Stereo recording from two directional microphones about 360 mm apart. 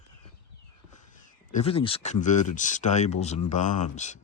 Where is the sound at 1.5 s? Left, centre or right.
Centre.